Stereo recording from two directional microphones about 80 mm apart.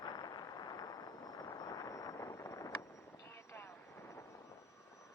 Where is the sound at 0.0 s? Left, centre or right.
Left.